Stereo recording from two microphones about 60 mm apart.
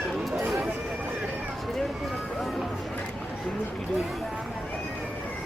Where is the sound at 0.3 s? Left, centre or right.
Centre.